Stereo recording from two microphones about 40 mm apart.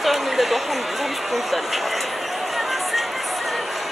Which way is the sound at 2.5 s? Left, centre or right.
Centre.